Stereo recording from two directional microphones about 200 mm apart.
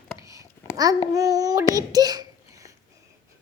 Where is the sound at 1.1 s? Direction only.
15° right (ahead or behind).